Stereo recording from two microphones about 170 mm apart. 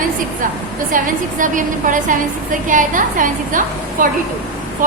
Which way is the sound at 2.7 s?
50° right (ahead or behind).